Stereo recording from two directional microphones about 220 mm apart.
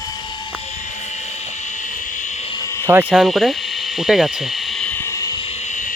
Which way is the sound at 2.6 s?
15° left (ahead or behind).